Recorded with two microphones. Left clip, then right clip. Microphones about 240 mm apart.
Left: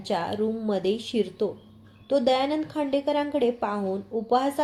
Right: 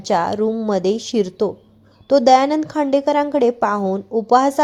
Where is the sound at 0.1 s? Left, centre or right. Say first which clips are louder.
Right 9 dB; right.